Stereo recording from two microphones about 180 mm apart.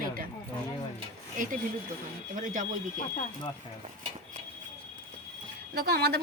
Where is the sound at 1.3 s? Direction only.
50° right (ahead or behind).